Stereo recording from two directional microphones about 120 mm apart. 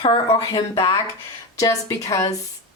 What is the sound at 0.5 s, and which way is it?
Speech, 35° left (ahead or behind).